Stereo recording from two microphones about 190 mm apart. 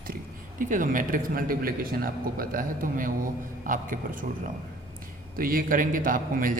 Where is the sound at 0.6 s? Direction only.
45° right (ahead or behind).